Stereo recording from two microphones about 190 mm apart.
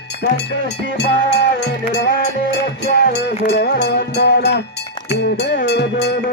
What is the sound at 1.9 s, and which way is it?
Music, 60° left (ahead or behind).